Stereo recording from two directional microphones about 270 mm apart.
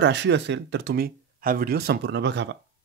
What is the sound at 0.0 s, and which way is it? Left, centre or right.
Speech, right.